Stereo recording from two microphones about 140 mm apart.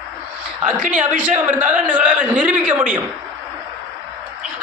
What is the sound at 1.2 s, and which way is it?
A man's voice, 10° right (ahead or behind).